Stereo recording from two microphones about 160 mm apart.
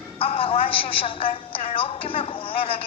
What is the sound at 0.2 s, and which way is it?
A woman's voice, 35° left (ahead or behind).